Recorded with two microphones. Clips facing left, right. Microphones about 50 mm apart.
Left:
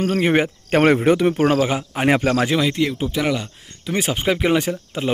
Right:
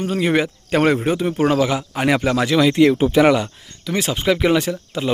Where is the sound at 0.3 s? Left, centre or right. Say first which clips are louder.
Left 1 dB; left.